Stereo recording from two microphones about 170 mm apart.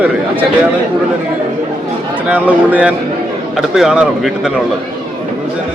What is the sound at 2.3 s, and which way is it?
A man's voice, 10° right (ahead or behind).